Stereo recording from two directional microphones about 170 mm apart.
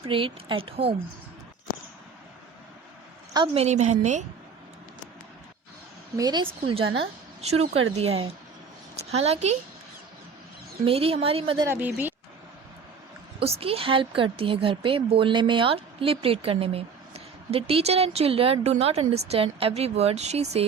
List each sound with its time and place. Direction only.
0.0 s speech: 30° right (ahead or behind)
3.3 s speech: 30° right (ahead or behind)
6.1 s a woman's voice: 25° right (ahead or behind)
10.8 s speech: 35° right (ahead or behind)
11.7 s speech: 10° right (ahead or behind)
13.4 s speech: 35° right (ahead or behind)